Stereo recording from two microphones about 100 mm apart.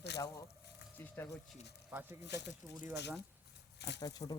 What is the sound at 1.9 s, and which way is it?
Speech, 20° right (ahead or behind).